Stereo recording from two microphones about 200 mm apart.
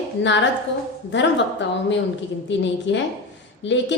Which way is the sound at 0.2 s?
65° left (ahead or behind).